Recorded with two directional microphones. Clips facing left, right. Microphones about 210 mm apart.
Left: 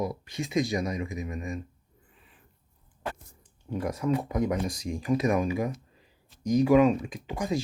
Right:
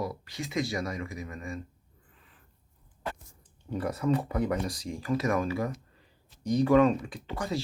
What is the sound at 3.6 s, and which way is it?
Speech, 10° left (ahead or behind).